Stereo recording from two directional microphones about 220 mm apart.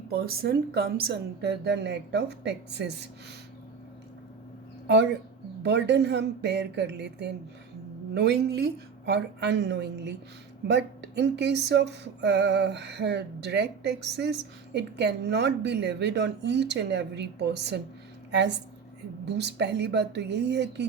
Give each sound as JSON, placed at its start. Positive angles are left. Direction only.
{"t": 0.1, "sound": "speech", "side_deg": -45}
{"t": 5.6, "sound": "a woman's voice", "side_deg": -50}